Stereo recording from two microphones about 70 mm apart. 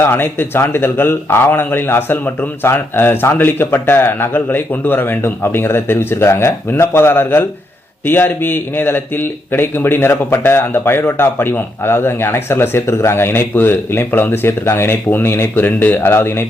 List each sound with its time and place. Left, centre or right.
0.0 s speech: left